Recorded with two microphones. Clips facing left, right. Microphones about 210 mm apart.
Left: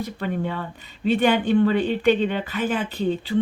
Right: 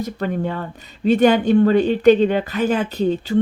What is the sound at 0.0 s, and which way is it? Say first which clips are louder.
Speech: right 4 dB; 45° right (ahead or behind).